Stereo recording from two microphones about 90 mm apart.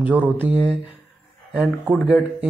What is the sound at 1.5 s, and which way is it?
Speech, 5° right (ahead or behind).